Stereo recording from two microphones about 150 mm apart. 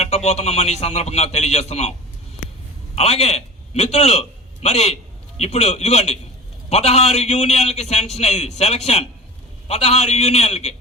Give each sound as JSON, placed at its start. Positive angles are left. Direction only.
{"t": 0.0, "sound": "a man's voice", "side_deg": 45}
{"t": 2.9, "sound": "a man's voice", "side_deg": 45}